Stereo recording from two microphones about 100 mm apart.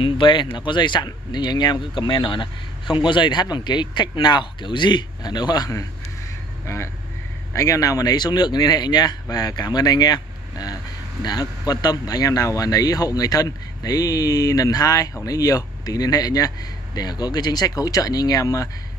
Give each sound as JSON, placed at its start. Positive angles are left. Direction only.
{"t": 0.0, "sound": "speech", "side_deg": 55}
{"t": 6.6, "sound": "speech", "side_deg": 30}